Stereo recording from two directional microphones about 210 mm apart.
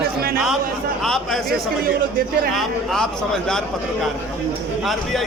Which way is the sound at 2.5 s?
Centre (ahead or behind).